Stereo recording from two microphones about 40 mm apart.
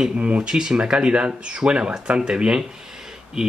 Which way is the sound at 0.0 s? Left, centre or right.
Right.